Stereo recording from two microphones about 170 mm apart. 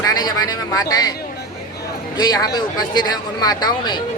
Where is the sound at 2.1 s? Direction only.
25° left (ahead or behind).